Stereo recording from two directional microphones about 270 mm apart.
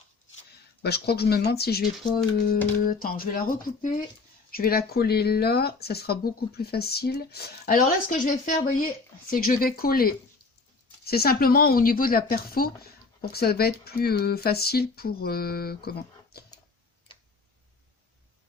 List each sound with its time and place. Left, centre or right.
0.8 s speech: left
2.8 s speech: left